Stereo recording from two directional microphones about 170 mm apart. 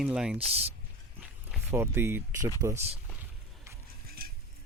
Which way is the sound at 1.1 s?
10° right (ahead or behind).